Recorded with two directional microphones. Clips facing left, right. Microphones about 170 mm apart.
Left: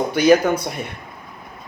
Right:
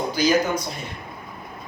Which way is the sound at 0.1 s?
60° left (ahead or behind).